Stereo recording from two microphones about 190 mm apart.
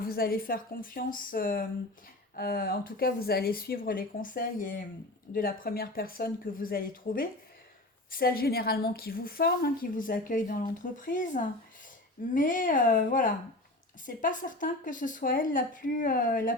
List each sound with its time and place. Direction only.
0.0 s a woman's voice: 50° left (ahead or behind)